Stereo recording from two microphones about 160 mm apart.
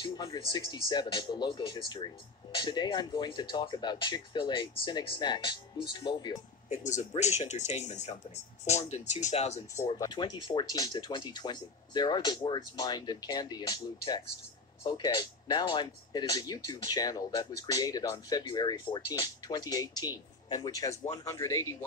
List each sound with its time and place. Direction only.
0.0 s speech: 25° left (ahead or behind)
6.7 s speech: 45° left (ahead or behind)
9.8 s speech: 25° left (ahead or behind)